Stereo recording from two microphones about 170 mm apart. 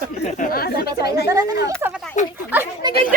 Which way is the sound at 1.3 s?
20° right (ahead or behind).